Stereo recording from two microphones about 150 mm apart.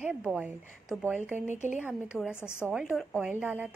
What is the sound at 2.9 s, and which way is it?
Speech, centre (ahead or behind).